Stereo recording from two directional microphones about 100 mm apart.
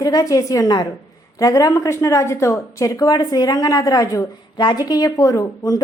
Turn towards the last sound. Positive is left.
turn(degrees=35)  # may be behind; listen again after turning